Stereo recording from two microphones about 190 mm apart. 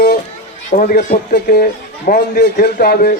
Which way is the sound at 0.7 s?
45° left (ahead or behind).